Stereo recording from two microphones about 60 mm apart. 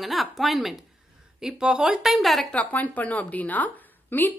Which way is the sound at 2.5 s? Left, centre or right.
Left.